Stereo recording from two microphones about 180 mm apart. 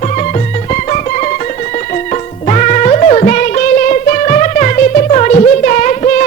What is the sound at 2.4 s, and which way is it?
Music, 40° left (ahead or behind).